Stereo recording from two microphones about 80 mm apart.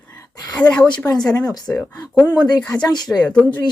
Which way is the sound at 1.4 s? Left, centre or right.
Left.